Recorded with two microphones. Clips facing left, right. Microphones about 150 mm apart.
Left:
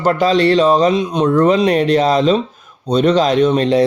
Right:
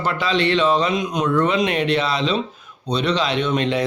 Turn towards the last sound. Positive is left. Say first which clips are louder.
# left 8 dB
turn(degrees=35)  # may be behind; listen again after turning